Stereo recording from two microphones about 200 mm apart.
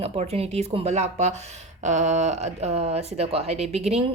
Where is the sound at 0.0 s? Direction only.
30° right (ahead or behind).